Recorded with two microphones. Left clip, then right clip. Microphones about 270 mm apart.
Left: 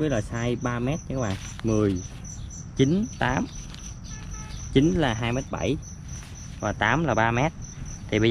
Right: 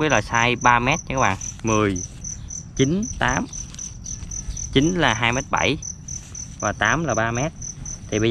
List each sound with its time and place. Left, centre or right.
0.4 s cricket: centre
1.1 s speech: centre